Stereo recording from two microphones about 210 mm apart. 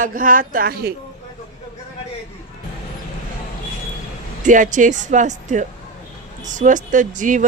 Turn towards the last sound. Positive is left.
turn(degrees=-35)  # may be behind; listen again after turning